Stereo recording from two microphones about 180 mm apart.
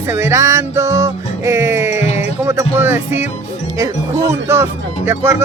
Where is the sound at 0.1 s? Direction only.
15° right (ahead or behind).